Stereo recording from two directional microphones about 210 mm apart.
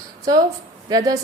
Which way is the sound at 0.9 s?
15° right (ahead or behind).